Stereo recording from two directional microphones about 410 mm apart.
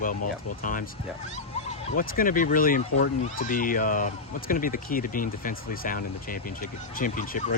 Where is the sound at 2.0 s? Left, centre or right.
Centre.